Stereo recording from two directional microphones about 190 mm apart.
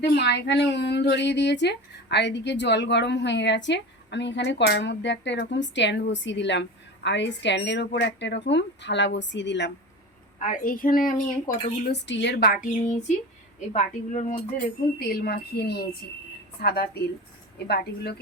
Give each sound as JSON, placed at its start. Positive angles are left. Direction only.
{"t": 0.0, "sound": "speech", "side_deg": 60}
{"t": 10.4, "sound": "speech", "side_deg": 45}
{"t": 11.9, "sound": "speech", "side_deg": 70}
{"t": 14.9, "sound": "speech", "side_deg": 55}